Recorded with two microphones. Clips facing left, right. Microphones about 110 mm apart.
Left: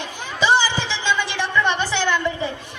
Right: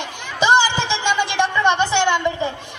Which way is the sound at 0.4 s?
20° right (ahead or behind).